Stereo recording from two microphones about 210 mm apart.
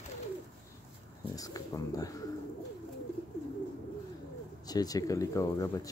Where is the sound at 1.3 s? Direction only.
15° left (ahead or behind).